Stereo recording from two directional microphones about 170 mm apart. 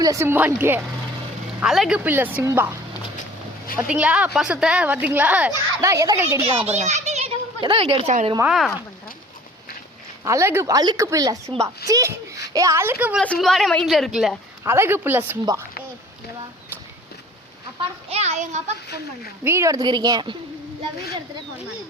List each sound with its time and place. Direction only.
0.0 s a woman's voice: 20° right (ahead or behind)
3.8 s a woman's voice: 5° right (ahead or behind)
5.8 s a woman's voice: 20° right (ahead or behind)
6.4 s a child's voice: 35° right (ahead or behind)
8.4 s a woman's voice: centre (ahead or behind)
10.2 s a woman's voice: 15° right (ahead or behind)
13.2 s a woman's voice: 5° left (ahead or behind)
14.6 s a woman's voice: 15° right (ahead or behind)
17.7 s a child's voice: 40° right (ahead or behind)
19.5 s speech: 15° right (ahead or behind)